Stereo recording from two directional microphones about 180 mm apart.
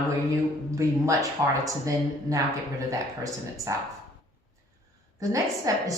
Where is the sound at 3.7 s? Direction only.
15° right (ahead or behind).